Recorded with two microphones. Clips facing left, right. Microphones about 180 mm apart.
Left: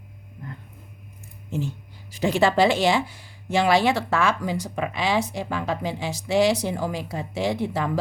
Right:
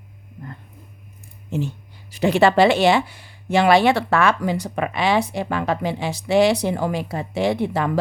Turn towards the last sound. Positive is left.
turn(degrees=-65)  # may be behind; listen again after turning